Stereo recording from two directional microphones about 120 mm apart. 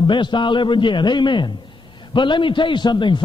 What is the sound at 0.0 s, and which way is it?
A man's voice, 40° left (ahead or behind).